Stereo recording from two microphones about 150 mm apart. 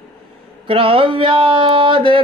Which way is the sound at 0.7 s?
35° right (ahead or behind).